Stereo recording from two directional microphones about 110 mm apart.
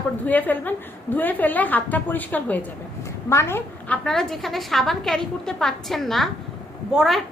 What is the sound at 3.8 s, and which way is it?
A woman's voice, 10° left (ahead or behind).